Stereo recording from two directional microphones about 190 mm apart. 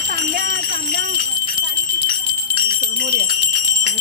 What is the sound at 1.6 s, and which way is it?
Bell, 55° right (ahead or behind).